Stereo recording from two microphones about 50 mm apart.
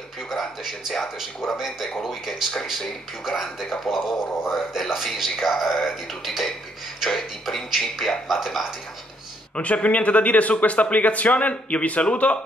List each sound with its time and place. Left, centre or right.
0.3 s a man's voice: centre
9.6 s a man's voice: left